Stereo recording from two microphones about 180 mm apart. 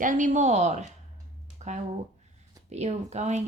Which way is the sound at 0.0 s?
45° right (ahead or behind).